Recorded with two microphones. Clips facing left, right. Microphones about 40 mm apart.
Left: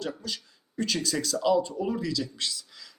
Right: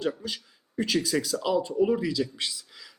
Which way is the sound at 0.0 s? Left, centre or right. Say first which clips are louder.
Right 4 dB; centre.